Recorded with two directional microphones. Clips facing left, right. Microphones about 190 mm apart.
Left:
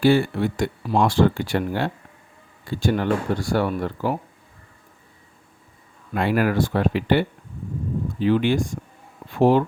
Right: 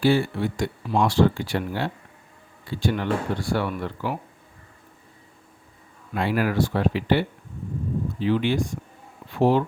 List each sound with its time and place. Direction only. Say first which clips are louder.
0.0 s speech: left 3 dB; 55° left (ahead or behind)
2.6 s speech: left 3 dB; 45° left (ahead or behind)
6.1 s speech: left 2 dB; 55° left (ahead or behind)